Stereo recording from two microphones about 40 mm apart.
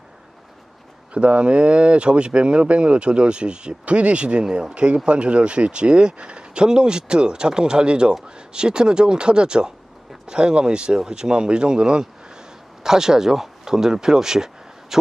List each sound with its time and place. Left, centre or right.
1.1 s speech: right
4.4 s speech: centre
4.7 s speech: right